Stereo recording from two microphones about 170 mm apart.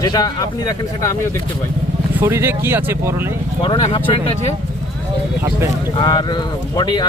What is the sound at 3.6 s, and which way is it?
Speech, 30° left (ahead or behind).